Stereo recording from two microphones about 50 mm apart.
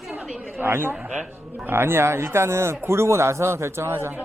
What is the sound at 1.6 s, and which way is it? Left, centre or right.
Speech, right.